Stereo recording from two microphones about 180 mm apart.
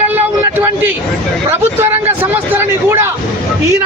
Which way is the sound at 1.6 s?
10° right (ahead or behind).